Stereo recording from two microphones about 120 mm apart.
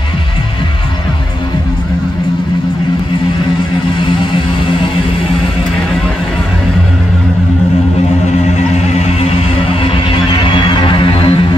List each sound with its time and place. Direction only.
8.3 s music: 70° left (ahead or behind); by 11.4 s 45° left (ahead or behind)